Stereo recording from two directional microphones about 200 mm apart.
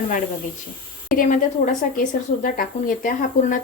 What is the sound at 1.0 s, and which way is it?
A woman's voice, 45° left (ahead or behind).